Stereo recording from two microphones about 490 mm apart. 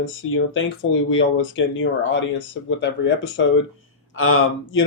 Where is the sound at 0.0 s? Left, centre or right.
Left.